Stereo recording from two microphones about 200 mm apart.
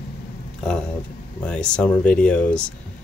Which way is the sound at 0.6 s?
5° left (ahead or behind).